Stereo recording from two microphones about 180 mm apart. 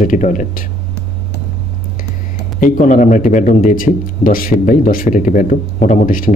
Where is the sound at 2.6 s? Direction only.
45° left (ahead or behind).